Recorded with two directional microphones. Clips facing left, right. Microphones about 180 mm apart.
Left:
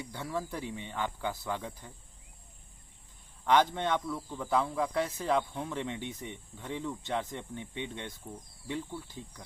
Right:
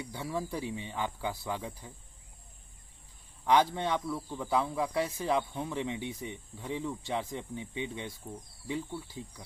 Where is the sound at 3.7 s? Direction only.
5° right (ahead or behind).